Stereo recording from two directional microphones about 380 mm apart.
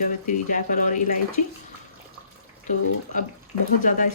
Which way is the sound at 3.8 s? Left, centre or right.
Centre.